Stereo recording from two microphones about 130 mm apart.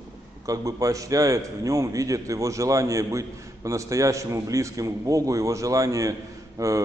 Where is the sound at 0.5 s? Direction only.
25° right (ahead or behind).